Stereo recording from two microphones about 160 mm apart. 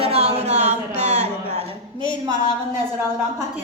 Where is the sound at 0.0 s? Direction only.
40° right (ahead or behind).